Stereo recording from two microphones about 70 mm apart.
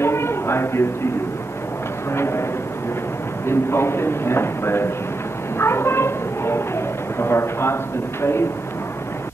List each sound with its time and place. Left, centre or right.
0.0 s a sound: left
2.1 s speech: left
3.4 s speech: left